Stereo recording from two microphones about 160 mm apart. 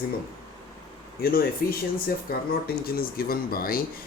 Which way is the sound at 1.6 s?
65° left (ahead or behind).